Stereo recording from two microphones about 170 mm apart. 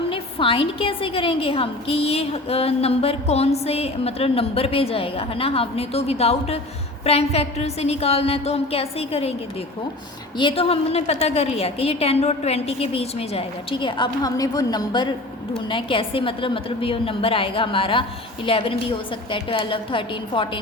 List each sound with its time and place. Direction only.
0.1 s a woman's voice: 30° left (ahead or behind)
10.3 s a woman's voice: 30° left (ahead or behind)